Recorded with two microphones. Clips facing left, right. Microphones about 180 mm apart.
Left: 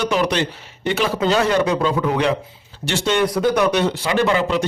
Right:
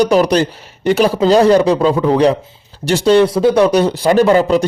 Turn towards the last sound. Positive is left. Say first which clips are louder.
# right 7 dB
turn(degrees=-40)  # may be behind; listen again after turning